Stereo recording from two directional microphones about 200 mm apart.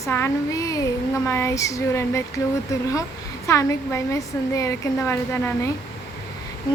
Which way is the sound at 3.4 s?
15° left (ahead or behind).